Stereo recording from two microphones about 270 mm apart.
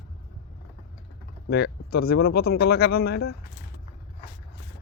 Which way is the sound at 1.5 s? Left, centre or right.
Left.